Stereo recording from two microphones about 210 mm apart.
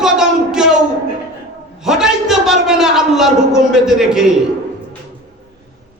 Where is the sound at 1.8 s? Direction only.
Centre (ahead or behind).